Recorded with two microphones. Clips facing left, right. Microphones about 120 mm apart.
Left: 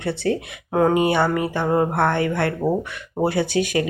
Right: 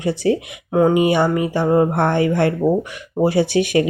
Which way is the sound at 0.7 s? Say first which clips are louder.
Right 3 dB; 5° right (ahead or behind).